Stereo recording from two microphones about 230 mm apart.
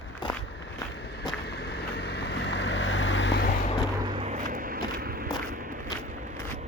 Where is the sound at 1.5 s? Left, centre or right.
Left.